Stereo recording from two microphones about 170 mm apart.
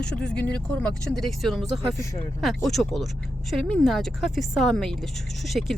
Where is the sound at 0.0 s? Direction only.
5° left (ahead or behind).